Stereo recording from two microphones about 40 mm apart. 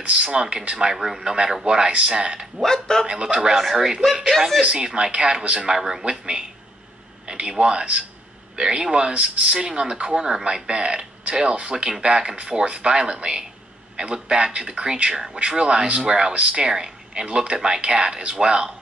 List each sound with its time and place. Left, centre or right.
0.0 s speech: right
1.2 s speech: right
2.6 s a man's voice: centre
3.1 s speech: right
3.3 s speech: centre
4.6 s speech: right
5.8 s speech: centre
6.0 s speech: right
9.1 s speech: right
9.5 s speech: right